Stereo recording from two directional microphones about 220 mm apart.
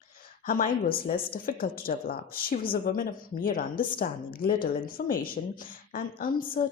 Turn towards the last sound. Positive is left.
turn(degrees=40)  # may be behind; listen again after turning